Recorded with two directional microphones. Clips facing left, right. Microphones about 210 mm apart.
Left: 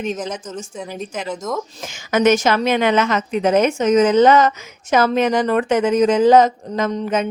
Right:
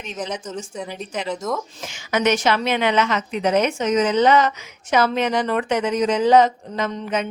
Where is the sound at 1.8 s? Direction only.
45° left (ahead or behind).